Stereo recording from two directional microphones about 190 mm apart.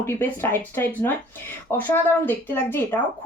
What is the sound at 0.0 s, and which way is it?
Speech, 10° left (ahead or behind).